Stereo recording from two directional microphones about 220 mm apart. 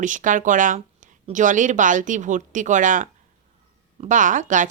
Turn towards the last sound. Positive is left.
turn(degrees=-35)  # may be behind; listen again after turning